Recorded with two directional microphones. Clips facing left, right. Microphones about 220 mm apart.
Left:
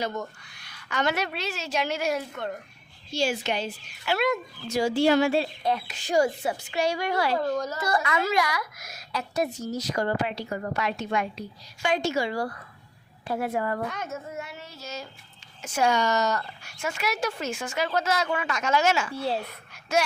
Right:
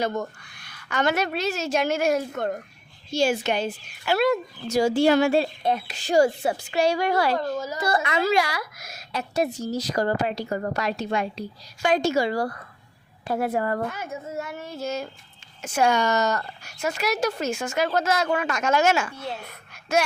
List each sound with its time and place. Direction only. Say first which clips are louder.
0.0 s speech: right 4 dB; 50° right (ahead or behind)
5.6 s a woman's voice: right 2 dB; 25° right (ahead or behind)
7.3 s speech: even; centre (ahead or behind)
7.8 s a woman's voice: right 3 dB; 30° right (ahead or behind); by 13.8 s 45° right (ahead or behind)
13.8 s speech: right 2 dB; 5° right (ahead or behind)
14.3 s speech: right 6 dB; 50° right (ahead or behind)
19.1 s a woman's voice: left 5 dB; 30° left (ahead or behind)